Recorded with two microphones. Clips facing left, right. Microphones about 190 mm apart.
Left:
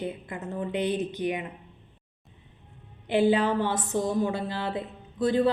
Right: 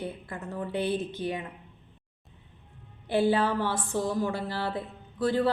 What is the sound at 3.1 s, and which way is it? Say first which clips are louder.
A woman's voice: left 2 dB; 15° left (ahead or behind).